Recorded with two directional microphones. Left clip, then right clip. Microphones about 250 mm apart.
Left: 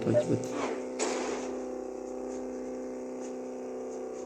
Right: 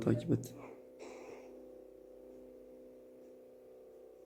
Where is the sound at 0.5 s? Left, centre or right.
Left.